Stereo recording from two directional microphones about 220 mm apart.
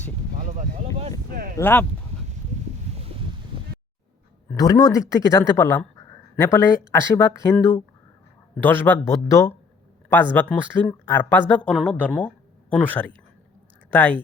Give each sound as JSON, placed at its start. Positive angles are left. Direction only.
{"t": 0.4, "sound": "a sound", "side_deg": -35}
{"t": 1.5, "sound": "speech", "side_deg": 10}
{"t": 4.5, "sound": "speech", "side_deg": 15}